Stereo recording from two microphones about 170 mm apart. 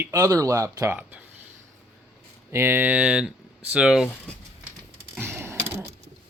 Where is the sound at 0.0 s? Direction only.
15° right (ahead or behind).